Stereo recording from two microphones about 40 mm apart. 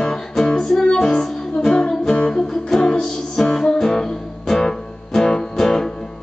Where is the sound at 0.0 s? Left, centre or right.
Centre.